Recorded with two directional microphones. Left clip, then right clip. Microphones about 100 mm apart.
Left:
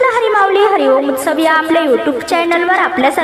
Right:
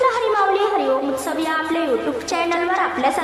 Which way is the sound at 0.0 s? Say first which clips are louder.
Left 6 dB; 50° left (ahead or behind).